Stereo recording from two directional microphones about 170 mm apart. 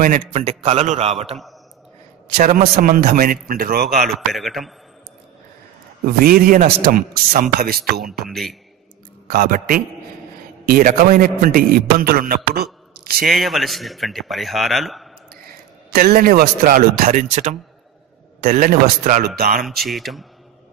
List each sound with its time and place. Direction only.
0.0 s a man's voice: 45° right (ahead or behind)
2.3 s a man's voice: 55° right (ahead or behind)
4.0 s a man's voice: centre (ahead or behind)
6.0 s a man's voice: 60° right (ahead or behind)
8.0 s a man's voice: centre (ahead or behind)
9.3 s a man's voice: 60° right (ahead or behind)
13.0 s a sound: 65° right (ahead or behind)
13.3 s a man's voice: centre (ahead or behind)
15.9 s a man's voice: 60° right (ahead or behind)
19.2 s a man's voice: 65° right (ahead or behind)
19.6 s a man's voice: centre (ahead or behind)